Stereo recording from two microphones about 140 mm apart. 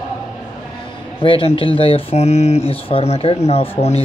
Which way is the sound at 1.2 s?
40° left (ahead or behind).